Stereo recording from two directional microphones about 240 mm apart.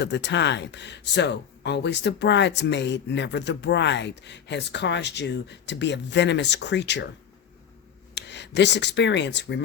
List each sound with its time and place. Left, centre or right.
0.0 s speech: left
8.1 s speech: left